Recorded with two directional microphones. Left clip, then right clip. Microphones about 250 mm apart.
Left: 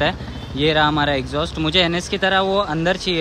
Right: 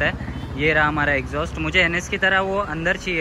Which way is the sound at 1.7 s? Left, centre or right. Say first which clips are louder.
Even; left.